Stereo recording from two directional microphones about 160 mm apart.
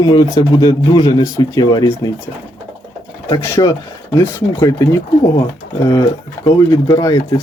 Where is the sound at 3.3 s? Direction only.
20° left (ahead or behind).